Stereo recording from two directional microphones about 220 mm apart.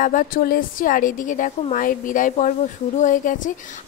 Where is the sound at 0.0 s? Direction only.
40° left (ahead or behind).